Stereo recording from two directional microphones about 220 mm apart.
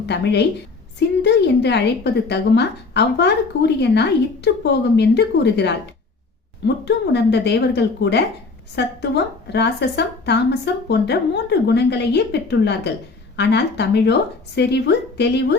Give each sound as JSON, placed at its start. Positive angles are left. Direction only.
{"t": 0.0, "sound": "a woman's voice", "side_deg": 50}